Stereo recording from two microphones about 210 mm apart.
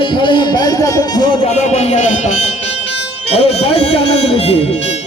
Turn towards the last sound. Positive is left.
turn(degrees=30)  # may be behind; listen again after turning